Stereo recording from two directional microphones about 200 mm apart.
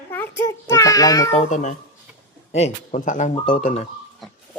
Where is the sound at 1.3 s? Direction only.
35° left (ahead or behind).